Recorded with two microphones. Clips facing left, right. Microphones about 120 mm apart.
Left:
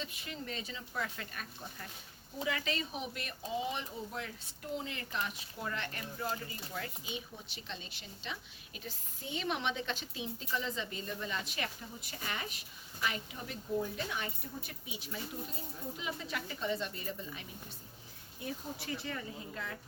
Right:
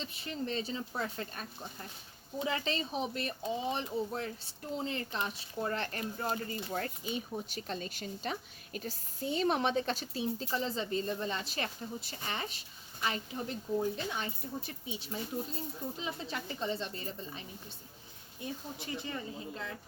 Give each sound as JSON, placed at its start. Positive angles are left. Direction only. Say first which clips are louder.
{"t": 0.0, "sound": "speech", "louder": "right 5 dB", "side_deg": -30}
{"t": 18.8, "sound": "speech", "louder": "right 1 dB", "side_deg": -20}